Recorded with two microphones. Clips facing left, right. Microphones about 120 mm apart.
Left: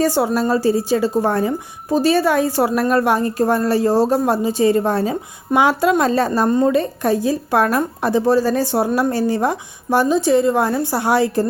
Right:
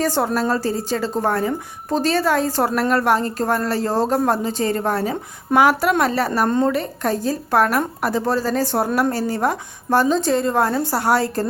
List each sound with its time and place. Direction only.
0.0 s a woman's voice: 10° left (ahead or behind)